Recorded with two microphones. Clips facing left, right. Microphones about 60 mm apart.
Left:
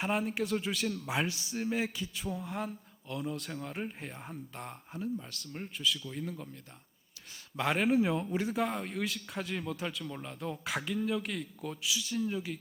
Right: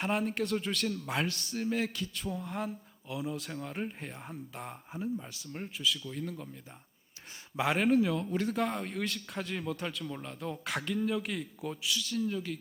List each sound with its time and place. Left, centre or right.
0.0 s a man's voice: centre
4.9 s speech: centre
5.5 s a man's voice: centre
7.6 s a man's voice: centre
8.0 s speech: left
8.3 s a man's voice: centre
11.9 s speech: centre